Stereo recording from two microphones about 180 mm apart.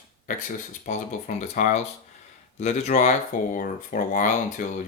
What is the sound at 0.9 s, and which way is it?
Speech, 40° left (ahead or behind).